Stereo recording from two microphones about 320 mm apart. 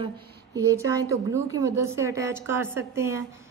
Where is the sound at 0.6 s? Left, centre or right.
Centre.